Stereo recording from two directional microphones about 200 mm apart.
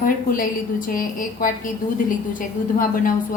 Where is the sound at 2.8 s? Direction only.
45° left (ahead or behind).